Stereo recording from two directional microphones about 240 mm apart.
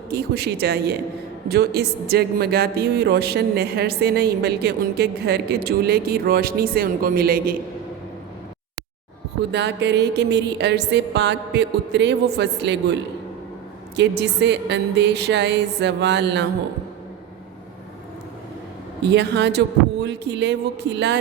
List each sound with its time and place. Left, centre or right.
0.1 s a man's voice: right
9.5 s music: right
19.0 s music: right